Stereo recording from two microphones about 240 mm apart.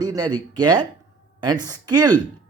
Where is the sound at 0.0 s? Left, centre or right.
Centre.